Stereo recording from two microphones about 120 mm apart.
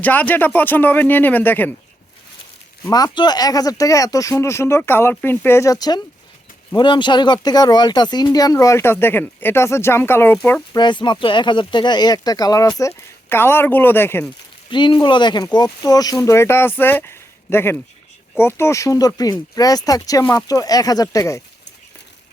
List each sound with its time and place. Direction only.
0.0 s a man's voice: 15° left (ahead or behind)
2.8 s speech: 35° left (ahead or behind)
10.8 s speech: 40° left (ahead or behind)
12.8 s speech: 20° left (ahead or behind)
14.7 s speech: 40° left (ahead or behind)